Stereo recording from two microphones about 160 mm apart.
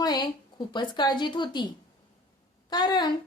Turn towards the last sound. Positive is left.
turn(degrees=25)  # may be behind; listen again after turning